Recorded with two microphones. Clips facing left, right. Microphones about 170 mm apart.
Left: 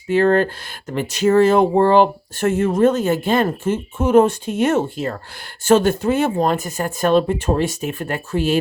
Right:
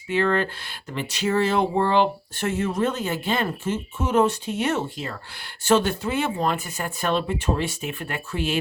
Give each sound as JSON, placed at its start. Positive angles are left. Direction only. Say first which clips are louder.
{"t": 0.1, "sound": "speech", "louder": "left 7 dB", "side_deg": 40}